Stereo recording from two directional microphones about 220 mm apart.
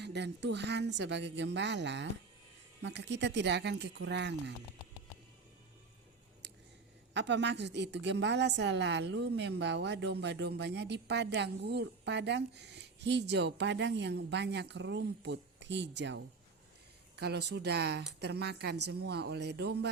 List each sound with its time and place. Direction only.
0.0 s a woman's voice: 50° right (ahead or behind)
7.1 s a woman's voice: 50° right (ahead or behind)